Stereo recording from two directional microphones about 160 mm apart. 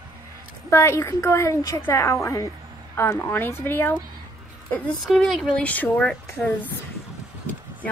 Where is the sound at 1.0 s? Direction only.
20° left (ahead or behind).